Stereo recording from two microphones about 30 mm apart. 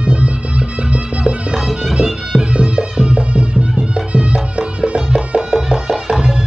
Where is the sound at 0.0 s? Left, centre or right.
Right.